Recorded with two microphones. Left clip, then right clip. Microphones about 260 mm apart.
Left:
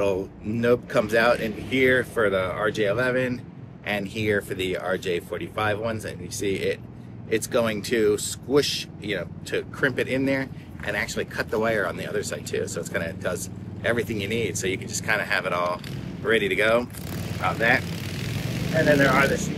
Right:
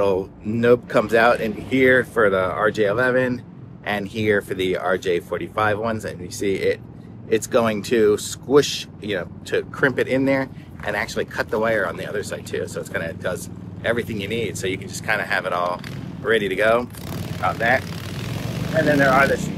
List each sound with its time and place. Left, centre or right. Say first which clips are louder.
0.0 s speech: right 4 dB; centre
17.8 s vehicle: right 1 dB; right
18.9 s speech: right 6 dB; centre